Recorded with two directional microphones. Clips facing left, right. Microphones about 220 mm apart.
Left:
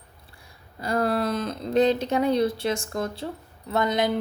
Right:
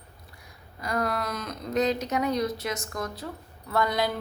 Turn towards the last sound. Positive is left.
turn(degrees=20)  # may be behind; listen again after turning